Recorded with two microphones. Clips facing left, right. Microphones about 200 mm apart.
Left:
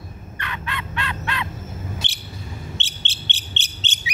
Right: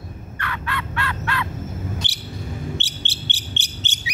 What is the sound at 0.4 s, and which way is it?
Fowl, 20° left (ahead or behind).